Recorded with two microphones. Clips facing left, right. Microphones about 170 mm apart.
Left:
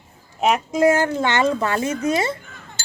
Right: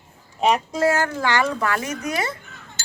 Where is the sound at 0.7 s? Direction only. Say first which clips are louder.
Left 4 dB; 20° left (ahead or behind).